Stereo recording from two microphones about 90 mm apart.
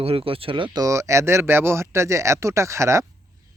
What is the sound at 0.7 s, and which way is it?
Speech, 35° right (ahead or behind).